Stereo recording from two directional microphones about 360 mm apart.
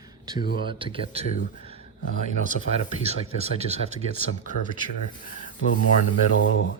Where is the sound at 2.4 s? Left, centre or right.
Right.